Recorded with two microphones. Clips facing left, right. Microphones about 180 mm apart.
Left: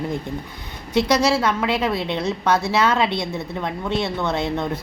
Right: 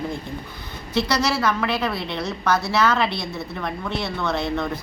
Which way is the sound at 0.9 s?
20° left (ahead or behind).